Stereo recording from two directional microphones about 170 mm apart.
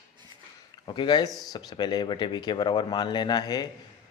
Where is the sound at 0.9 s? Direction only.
30° left (ahead or behind).